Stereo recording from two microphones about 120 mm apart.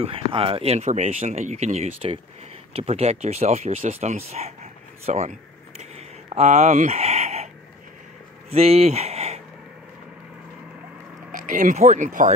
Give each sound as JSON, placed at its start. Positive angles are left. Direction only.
{"t": 0.0, "sound": "speech", "side_deg": -50}
{"t": 5.0, "sound": "a sound", "side_deg": -70}
{"t": 8.5, "sound": "speech", "side_deg": -55}
{"t": 11.3, "sound": "speech", "side_deg": -85}